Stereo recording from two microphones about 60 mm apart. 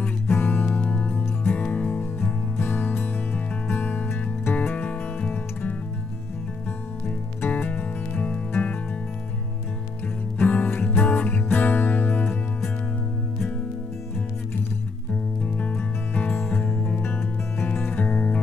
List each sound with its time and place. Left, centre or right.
0.3 s music: left
1.6 s music: left
4.7 s music: left
7.4 s music: left
10.4 s music: left
15.4 s music: left